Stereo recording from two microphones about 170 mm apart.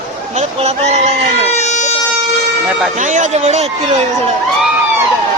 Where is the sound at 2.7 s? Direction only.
5° right (ahead or behind).